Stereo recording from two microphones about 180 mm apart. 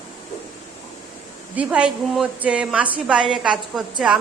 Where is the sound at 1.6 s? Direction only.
5° right (ahead or behind).